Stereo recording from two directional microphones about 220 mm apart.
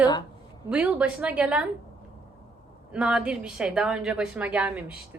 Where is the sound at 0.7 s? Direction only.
5° right (ahead or behind).